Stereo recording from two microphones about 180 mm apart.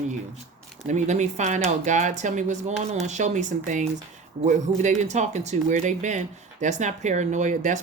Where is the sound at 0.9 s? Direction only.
40° right (ahead or behind).